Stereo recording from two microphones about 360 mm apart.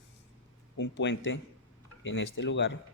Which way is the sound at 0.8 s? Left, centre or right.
Left.